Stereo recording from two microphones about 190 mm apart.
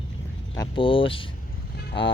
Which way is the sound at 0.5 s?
25° left (ahead or behind).